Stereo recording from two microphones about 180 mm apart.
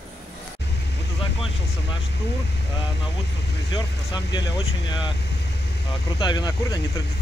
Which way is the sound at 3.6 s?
25° left (ahead or behind).